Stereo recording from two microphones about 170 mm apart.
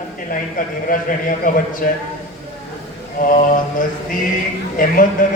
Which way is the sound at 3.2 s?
55° left (ahead or behind).